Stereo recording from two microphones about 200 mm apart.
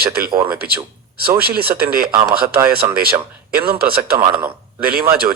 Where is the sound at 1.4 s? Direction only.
50° right (ahead or behind).